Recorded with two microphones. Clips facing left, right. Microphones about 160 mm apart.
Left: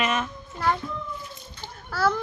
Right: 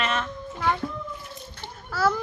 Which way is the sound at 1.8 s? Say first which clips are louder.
Even; 5° right (ahead or behind).